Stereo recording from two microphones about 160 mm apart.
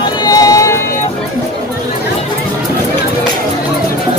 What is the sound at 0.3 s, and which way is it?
Run, 20° left (ahead or behind).